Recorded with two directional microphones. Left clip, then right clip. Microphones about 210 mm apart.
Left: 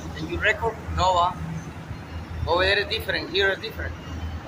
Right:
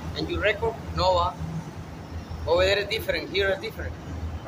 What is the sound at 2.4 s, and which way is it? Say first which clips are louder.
Speech: left 1 dB; 35° right (ahead or behind).